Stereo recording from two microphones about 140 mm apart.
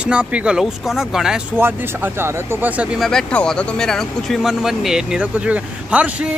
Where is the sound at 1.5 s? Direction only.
15° right (ahead or behind).